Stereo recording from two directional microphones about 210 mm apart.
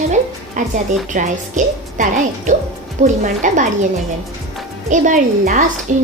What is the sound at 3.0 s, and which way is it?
Speech, 35° right (ahead or behind).